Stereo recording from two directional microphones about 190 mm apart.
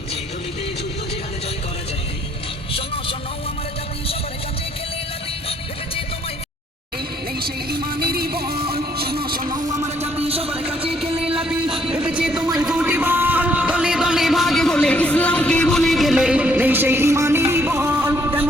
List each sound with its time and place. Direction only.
2.7 s vehicle: 30° left (ahead or behind)
7.3 s music: 50° right (ahead or behind)
8.7 s vehicle: 55° right (ahead or behind)
9.4 s a sound: 20° right (ahead or behind)
10.0 s a sound: 30° right (ahead or behind)
11.4 s music: 5° right (ahead or behind)